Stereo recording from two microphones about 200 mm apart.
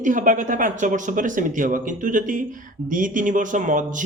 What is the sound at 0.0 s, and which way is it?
Speech, 40° right (ahead or behind).